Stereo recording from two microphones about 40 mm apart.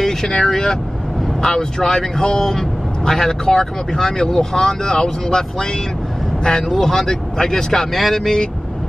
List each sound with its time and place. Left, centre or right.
0.0 s speech: centre